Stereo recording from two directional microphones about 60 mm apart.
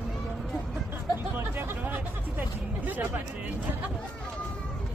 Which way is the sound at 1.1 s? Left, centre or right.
Right.